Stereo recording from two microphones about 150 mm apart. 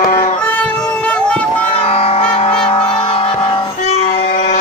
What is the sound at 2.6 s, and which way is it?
Music, 35° left (ahead or behind).